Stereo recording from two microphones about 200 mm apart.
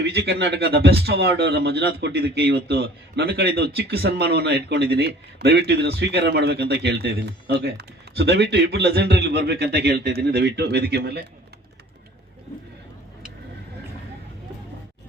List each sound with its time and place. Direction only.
0.0 s speech: 55° right (ahead or behind)